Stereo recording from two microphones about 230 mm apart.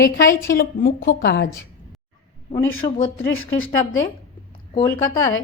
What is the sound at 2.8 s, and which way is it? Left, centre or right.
Speech, centre.